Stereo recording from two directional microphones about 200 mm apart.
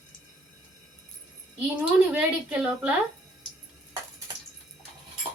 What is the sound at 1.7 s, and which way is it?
A woman's voice, 5° right (ahead or behind).